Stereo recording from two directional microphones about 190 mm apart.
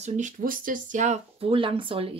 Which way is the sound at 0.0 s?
40° right (ahead or behind).